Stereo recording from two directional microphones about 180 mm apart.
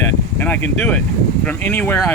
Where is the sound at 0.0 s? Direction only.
10° left (ahead or behind).